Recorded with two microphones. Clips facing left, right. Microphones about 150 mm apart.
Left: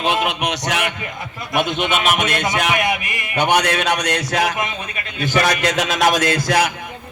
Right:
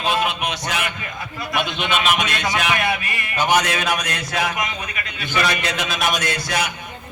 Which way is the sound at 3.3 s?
65° left (ahead or behind).